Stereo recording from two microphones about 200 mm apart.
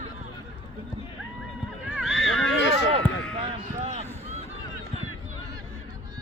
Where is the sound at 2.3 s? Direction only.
85° left.